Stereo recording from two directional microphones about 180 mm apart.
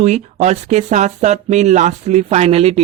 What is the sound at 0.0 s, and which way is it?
A woman's voice, 40° right (ahead or behind).